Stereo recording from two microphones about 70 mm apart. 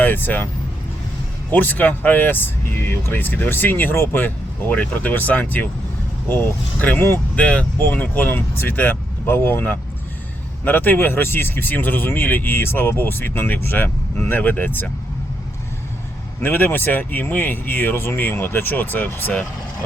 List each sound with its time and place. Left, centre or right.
0.0 s speech: left
1.5 s speech: left
7.3 s speech: centre
16.4 s speech: left